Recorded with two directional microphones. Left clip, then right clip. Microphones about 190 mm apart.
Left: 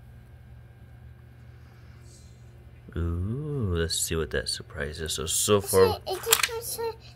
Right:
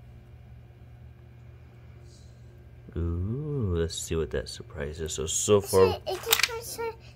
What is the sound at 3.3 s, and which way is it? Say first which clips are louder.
Speech: even; 5° right (ahead or behind).